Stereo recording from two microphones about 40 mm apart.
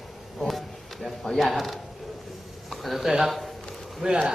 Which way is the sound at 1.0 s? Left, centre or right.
Centre.